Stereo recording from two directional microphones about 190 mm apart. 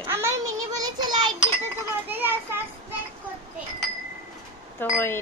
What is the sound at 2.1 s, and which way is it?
Speech, 10° right (ahead or behind).